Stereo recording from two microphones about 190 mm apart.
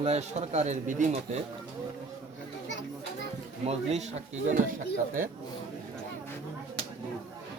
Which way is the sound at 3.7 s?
35° right (ahead or behind).